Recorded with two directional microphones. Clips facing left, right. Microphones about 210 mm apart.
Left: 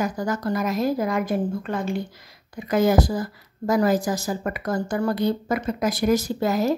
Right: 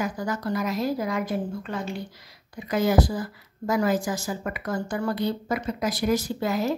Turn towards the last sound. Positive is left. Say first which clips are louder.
# left 4 dB
turn(degrees=40)  # may be behind; listen again after turning